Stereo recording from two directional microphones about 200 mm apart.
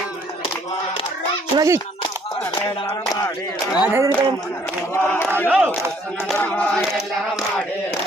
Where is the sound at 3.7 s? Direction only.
10° right (ahead or behind).